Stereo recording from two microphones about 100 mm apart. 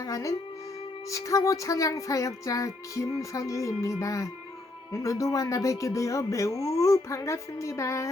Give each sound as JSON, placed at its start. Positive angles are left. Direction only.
{"t": 0.0, "sound": "music", "side_deg": 35}
{"t": 1.1, "sound": "speech", "side_deg": 35}